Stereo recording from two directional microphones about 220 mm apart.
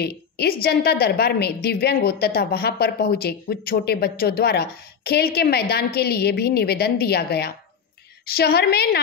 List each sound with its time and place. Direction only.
0.0 s a woman's voice: 45° left (ahead or behind)